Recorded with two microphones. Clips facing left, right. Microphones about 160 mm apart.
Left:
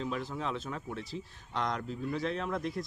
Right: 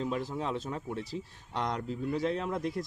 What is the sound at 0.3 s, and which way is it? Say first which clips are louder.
Speech: right 2 dB; 25° right (ahead or behind).